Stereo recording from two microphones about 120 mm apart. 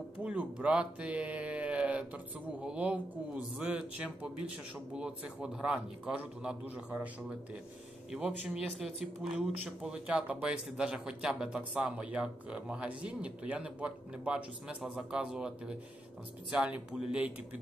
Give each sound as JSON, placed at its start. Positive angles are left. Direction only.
{"t": 0.2, "sound": "speech", "side_deg": -10}